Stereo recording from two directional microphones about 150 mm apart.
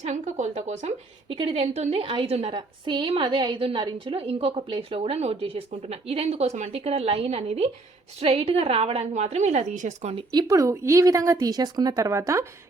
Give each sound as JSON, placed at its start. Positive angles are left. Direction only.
{"t": 0.0, "sound": "a woman's voice", "side_deg": -50}
{"t": 10.3, "sound": "speech", "side_deg": -20}